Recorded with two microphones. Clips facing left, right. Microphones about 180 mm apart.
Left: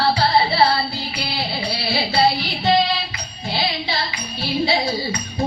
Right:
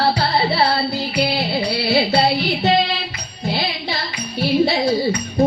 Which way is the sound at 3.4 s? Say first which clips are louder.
Right 1 dB; 60° right (ahead or behind).